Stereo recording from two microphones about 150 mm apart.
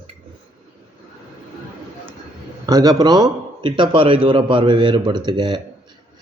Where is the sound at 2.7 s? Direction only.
25° right (ahead or behind).